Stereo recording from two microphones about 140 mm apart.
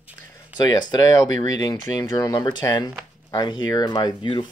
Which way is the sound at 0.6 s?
25° left (ahead or behind).